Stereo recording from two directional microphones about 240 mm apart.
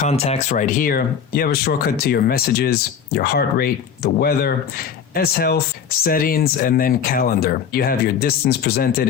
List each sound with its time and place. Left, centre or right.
0.0 s speech: left